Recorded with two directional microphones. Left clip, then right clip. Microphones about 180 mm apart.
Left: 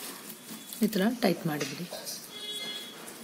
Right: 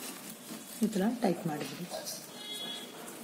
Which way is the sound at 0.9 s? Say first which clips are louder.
Left 4 dB; 50° left (ahead or behind).